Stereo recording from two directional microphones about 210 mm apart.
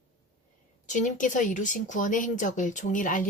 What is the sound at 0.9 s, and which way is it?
Speech, 35° left (ahead or behind).